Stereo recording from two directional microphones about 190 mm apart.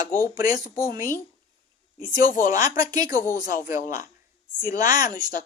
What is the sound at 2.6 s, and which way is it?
Speech, 20° right (ahead or behind).